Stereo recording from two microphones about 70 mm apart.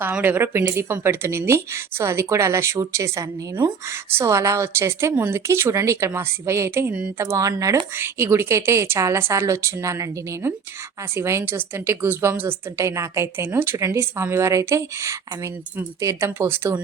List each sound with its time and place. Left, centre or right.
0.0 s a woman's voice: right
7.9 s a woman's voice: right